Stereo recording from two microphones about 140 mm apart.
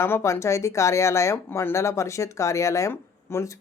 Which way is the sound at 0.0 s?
20° left (ahead or behind).